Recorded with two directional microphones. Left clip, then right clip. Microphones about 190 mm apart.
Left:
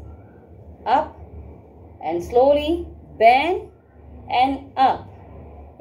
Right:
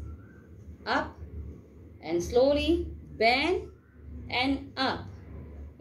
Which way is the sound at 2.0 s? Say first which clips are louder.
Left 7 dB; 25° right (ahead or behind).